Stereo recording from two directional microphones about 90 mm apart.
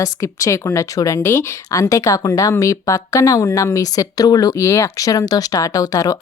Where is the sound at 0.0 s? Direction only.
40° left (ahead or behind).